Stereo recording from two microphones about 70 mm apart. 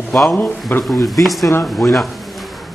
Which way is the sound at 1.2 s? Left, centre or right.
Centre.